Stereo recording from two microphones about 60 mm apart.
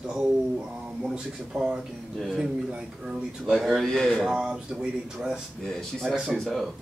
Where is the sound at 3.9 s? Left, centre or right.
Centre.